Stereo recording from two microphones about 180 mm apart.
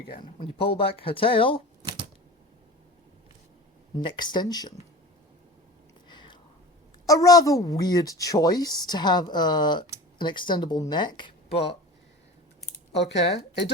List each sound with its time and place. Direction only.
0.2 s a woman's voice: 25° left (ahead or behind)
4.0 s a woman's voice: 25° left (ahead or behind)
6.1 s a sound: 25° left (ahead or behind)
7.1 s a woman's voice: 20° left (ahead or behind)
13.0 s speech: 70° left (ahead or behind)